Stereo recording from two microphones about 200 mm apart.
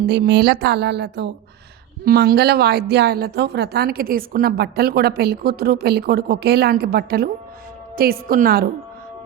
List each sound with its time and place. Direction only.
0.0 s a woman's voice: 55° right (ahead or behind)